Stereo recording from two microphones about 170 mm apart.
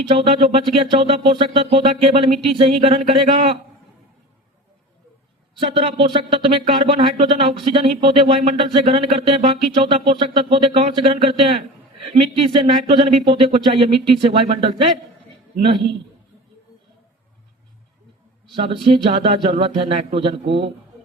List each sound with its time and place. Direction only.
0.1 s speech: 30° right (ahead or behind)
5.5 s speech: 30° right (ahead or behind)
18.5 s speech: 30° right (ahead or behind)